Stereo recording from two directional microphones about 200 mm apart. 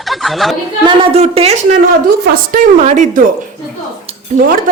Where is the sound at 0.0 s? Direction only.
Centre (ahead or behind).